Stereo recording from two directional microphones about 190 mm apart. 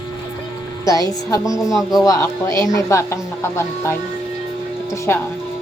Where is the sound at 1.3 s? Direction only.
15° left (ahead or behind).